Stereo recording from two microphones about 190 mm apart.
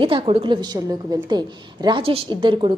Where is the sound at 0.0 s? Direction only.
30° right (ahead or behind).